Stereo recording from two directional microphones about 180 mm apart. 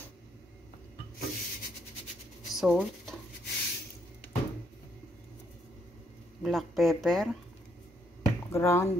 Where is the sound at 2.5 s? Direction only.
Centre (ahead or behind).